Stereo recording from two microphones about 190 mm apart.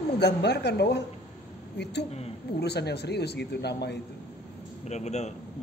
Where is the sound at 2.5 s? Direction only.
60° left (ahead or behind).